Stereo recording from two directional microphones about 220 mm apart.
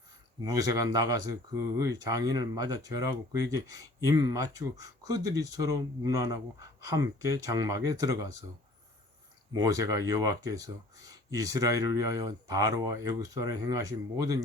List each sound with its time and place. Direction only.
0.4 s speech: 15° right (ahead or behind)
9.6 s speech: 15° right (ahead or behind)